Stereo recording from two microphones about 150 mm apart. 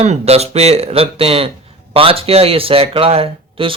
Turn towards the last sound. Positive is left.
turn(degrees=-40)  # may be behind; listen again after turning